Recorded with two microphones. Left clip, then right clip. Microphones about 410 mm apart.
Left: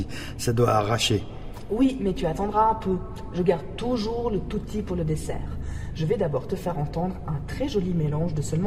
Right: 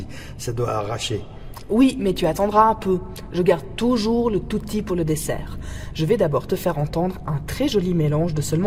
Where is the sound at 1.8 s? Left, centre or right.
Right.